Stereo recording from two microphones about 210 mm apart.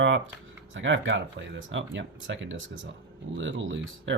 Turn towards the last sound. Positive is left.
turn(degrees=-60)  # may be behind; listen again after turning